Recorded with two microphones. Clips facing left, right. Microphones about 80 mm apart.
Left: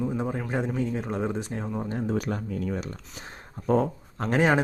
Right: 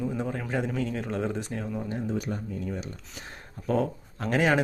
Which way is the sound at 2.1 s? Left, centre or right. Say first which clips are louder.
Left 3 dB; left.